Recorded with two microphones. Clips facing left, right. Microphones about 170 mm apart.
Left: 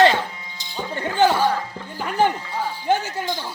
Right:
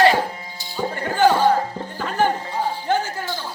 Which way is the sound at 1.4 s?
45° right (ahead or behind).